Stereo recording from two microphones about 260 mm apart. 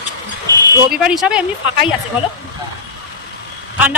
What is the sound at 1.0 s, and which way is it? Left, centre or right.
Speech, centre.